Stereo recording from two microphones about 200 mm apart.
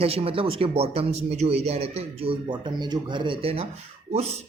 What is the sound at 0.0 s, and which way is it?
Speech, 30° right (ahead or behind).